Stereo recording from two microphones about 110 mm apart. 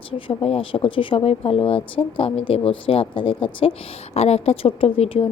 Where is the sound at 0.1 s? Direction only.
60° left (ahead or behind).